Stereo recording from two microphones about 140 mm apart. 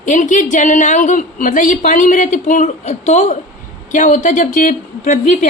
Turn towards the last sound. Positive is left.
turn(degrees=60)  # may be behind; listen again after turning